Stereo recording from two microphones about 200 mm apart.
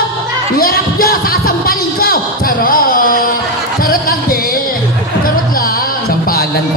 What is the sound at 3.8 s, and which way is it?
Music, 45° left (ahead or behind).